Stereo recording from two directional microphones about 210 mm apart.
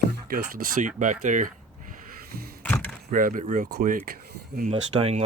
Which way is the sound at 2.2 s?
45° right (ahead or behind).